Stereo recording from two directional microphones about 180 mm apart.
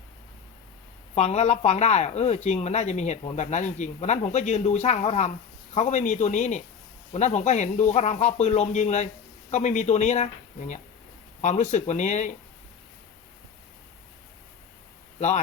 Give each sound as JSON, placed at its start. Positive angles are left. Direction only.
{"t": 1.1, "sound": "speech", "side_deg": 35}